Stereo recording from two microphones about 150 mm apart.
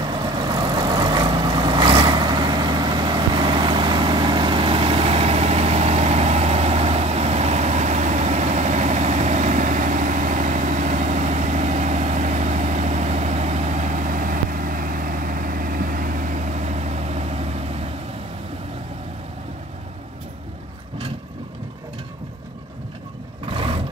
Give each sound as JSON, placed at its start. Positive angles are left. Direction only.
{"t": 0.1, "sound": "vehicle", "side_deg": -30}
{"t": 23.5, "sound": "vehicle", "side_deg": -35}